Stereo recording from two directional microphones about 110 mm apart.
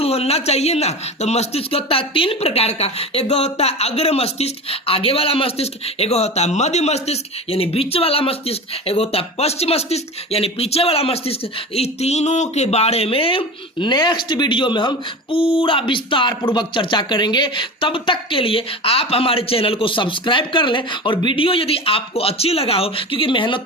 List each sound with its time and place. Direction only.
0.0 s speech: 65° left (ahead or behind); by 23.6 s 50° left (ahead or behind)